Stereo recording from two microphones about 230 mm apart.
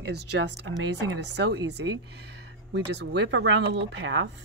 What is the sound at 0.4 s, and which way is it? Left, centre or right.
Speech, right.